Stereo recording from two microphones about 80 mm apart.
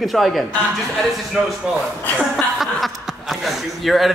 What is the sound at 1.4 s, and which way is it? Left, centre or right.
Speech, centre.